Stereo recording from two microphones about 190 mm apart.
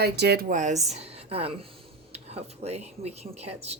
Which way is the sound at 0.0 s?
60° right (ahead or behind).